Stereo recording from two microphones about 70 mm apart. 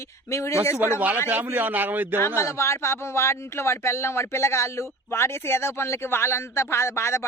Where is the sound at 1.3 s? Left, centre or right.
Right.